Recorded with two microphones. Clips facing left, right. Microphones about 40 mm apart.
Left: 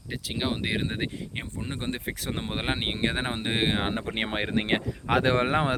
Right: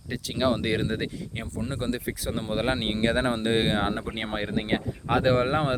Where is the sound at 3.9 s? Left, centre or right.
Left.